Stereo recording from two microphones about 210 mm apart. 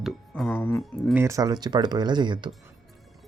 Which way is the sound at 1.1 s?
15° right (ahead or behind).